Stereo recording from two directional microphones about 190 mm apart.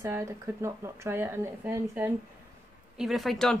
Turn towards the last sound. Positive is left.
turn(degrees=0)  # may be behind; listen again after turning